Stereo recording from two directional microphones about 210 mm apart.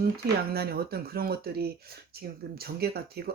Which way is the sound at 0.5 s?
50° right (ahead or behind).